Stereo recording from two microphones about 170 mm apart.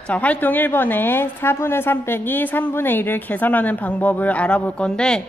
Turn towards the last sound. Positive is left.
turn(degrees=5)  # may be behind; listen again after turning